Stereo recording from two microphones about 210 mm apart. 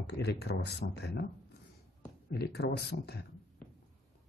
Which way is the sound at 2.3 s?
50° left (ahead or behind).